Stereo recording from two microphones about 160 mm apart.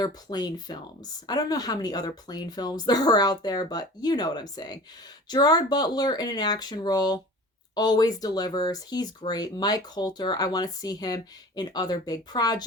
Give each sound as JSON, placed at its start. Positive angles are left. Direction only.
{"t": 0.0, "sound": "speech", "side_deg": 25}